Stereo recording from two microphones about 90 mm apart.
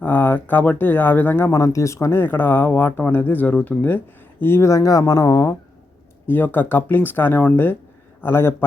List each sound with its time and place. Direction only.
0.0 s speech: 20° left (ahead or behind); by 5.5 s 35° left (ahead or behind)
6.2 s speech: 20° left (ahead or behind)